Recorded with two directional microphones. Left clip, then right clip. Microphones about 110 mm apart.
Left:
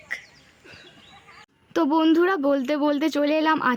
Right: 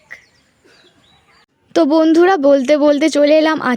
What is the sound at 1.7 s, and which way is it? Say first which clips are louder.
A woman's voice: right 8 dB; 45° right (ahead or behind).